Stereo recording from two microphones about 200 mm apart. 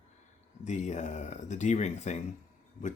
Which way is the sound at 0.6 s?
35° left (ahead or behind).